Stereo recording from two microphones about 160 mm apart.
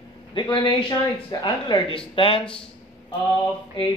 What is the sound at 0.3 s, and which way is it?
Speech, 30° left (ahead or behind).